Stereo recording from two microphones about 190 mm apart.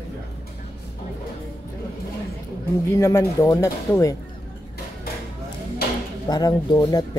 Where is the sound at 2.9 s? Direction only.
15° left (ahead or behind).